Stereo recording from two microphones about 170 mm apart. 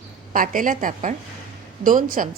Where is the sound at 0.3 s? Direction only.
50° right (ahead or behind).